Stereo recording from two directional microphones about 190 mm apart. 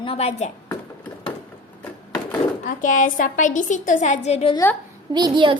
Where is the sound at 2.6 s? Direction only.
45° left (ahead or behind).